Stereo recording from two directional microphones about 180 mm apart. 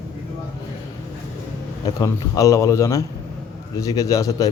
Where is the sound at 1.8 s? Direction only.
20° left (ahead or behind).